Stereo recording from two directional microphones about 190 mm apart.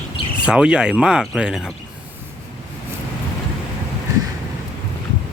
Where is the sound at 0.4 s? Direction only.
5° right (ahead or behind).